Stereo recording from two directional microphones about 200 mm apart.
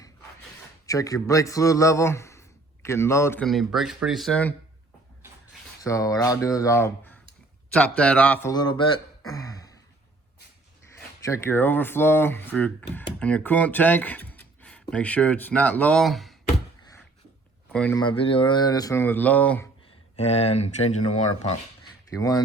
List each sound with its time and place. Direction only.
0.9 s a man's voice: 15° left (ahead or behind)
3.4 s speech: centre (ahead or behind)
5.8 s speech: 15° left (ahead or behind)
9.3 s throat clearing: 15° left (ahead or behind)
11.3 s speech: 10° left (ahead or behind)
17.7 s a sound: 5° left (ahead or behind)
17.9 s speech: 25° left (ahead or behind); by 19.6 s 5° left (ahead or behind)
20.1 s speech: 30° left (ahead or behind)
22.1 s speech: 15° left (ahead or behind)